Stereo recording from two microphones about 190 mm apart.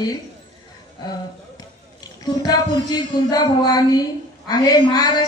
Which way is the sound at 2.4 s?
20° left (ahead or behind).